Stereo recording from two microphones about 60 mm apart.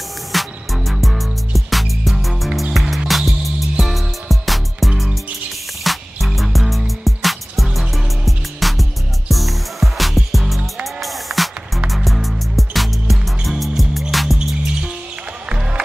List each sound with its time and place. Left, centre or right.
0.3 s music: centre
15.4 s music: centre